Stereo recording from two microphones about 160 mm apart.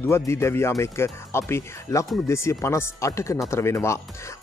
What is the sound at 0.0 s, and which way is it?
Speech, 15° left (ahead or behind).